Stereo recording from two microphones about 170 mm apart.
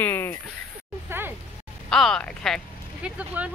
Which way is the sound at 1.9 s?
Centre (ahead or behind).